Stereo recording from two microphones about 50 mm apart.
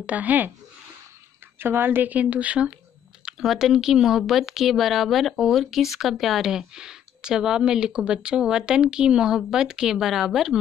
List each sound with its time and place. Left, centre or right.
0.0 s speech: right
1.6 s a woman's voice: right
2.1 s speech: right
3.4 s speech: centre